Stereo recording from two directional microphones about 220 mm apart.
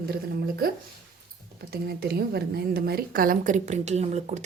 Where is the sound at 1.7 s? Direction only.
45° right (ahead or behind).